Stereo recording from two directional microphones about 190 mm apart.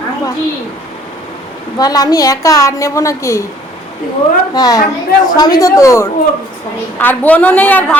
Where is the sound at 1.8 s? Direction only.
20° left (ahead or behind).